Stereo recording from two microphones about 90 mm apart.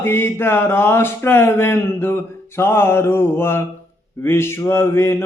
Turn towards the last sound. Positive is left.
turn(degrees=30)  # may be behind; listen again after turning